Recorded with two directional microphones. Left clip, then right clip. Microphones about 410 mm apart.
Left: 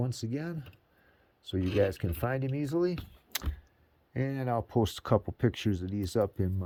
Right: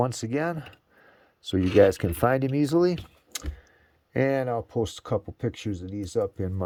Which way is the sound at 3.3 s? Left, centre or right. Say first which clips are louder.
Even; centre.